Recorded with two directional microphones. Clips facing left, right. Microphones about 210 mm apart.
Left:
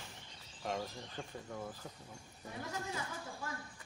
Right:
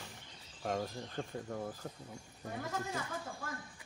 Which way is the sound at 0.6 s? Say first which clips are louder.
Right 3 dB; 45° right (ahead or behind).